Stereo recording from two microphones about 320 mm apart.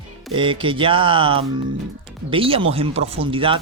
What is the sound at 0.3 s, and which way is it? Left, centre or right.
Speech, centre.